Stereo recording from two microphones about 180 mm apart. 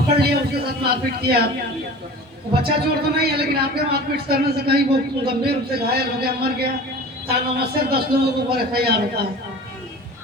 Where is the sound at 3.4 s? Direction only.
60° right (ahead or behind).